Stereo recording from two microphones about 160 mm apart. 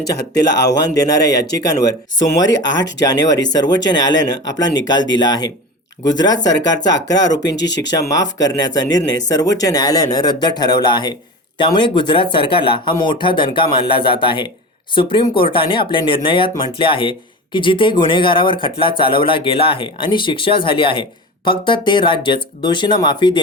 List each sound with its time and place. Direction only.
0.2 s speech: 90° left
0.9 s speech: 20° left (ahead or behind)
1.2 s speech: 90° left
2.2 s speech: 20° left (ahead or behind)
7.5 s speech: 90° left
8.1 s speech: 25° left (ahead or behind)